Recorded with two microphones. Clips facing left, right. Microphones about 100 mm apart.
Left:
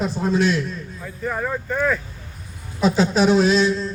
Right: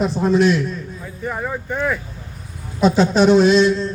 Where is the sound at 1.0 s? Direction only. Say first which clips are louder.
Left 1 dB; 10° right (ahead or behind).